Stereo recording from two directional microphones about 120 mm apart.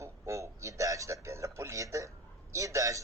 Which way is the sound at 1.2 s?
25° right (ahead or behind).